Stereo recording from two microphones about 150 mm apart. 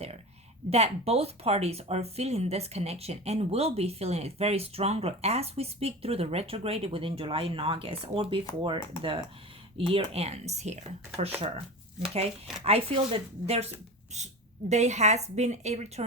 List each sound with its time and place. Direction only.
0.7 s speech: 45° right (ahead or behind)